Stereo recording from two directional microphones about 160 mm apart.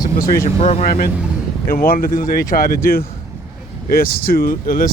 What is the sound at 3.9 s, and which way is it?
Speech, 65° left (ahead or behind).